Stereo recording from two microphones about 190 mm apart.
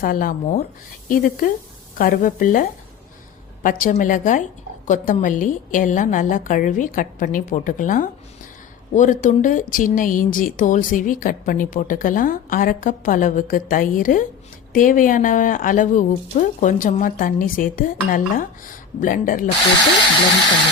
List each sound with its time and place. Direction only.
0.0 s speech: 45° left (ahead or behind)